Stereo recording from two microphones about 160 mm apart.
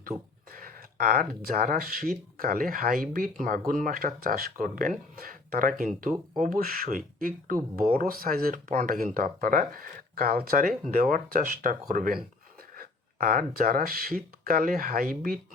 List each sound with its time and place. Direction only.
0.1 s speech: 20° right (ahead or behind)
0.5 s speech: 65° right (ahead or behind)